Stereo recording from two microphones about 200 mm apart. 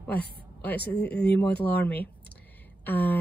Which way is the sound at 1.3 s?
5° left (ahead or behind).